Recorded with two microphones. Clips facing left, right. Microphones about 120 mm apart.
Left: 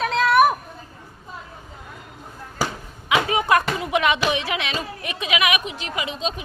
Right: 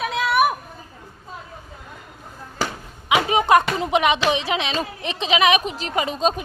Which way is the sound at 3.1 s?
20° right (ahead or behind).